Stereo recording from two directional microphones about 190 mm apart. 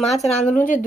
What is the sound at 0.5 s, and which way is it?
Speech, 45° left (ahead or behind).